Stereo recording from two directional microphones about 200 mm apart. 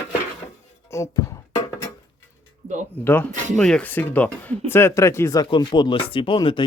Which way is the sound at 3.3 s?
40° right (ahead or behind).